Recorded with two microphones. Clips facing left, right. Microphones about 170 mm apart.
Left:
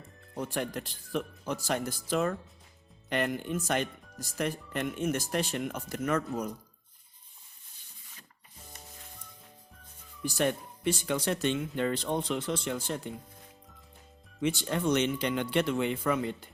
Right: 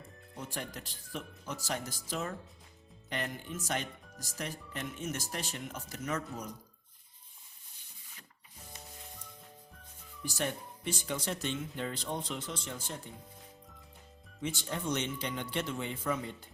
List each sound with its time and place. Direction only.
0.3 s speech: 60° left (ahead or behind)
10.2 s speech: 65° left (ahead or behind)
14.4 s speech: 75° left (ahead or behind)